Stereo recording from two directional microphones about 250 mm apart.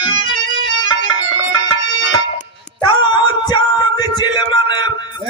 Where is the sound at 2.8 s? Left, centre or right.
Centre.